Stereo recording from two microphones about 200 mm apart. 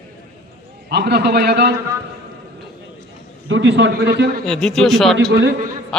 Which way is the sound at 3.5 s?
65° right (ahead or behind).